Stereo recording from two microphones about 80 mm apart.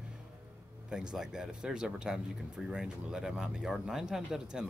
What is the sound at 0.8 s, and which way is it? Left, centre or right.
Speech, centre.